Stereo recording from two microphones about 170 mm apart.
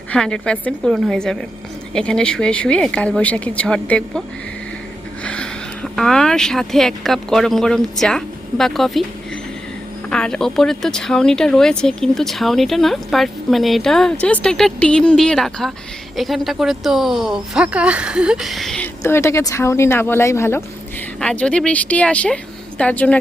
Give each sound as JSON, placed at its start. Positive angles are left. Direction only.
{"t": 0.1, "sound": "speech", "side_deg": 5}
{"t": 5.2, "sound": "speech", "side_deg": 5}
{"t": 10.1, "sound": "speech", "side_deg": 5}
{"t": 19.0, "sound": "speech", "side_deg": 15}